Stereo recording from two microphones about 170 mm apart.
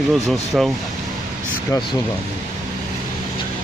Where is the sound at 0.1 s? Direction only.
Centre (ahead or behind).